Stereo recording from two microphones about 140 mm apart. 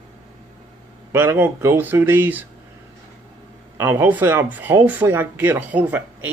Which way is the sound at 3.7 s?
15° right (ahead or behind).